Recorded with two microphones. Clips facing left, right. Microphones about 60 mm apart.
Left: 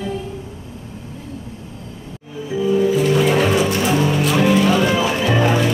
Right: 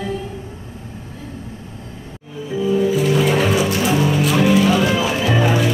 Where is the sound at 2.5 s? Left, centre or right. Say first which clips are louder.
Left 1 dB; centre.